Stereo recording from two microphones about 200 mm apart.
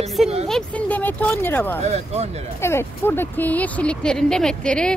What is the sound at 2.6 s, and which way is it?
Speech, 10° left (ahead or behind).